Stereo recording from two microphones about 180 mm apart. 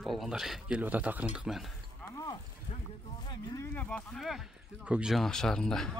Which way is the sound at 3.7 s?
5° left (ahead or behind).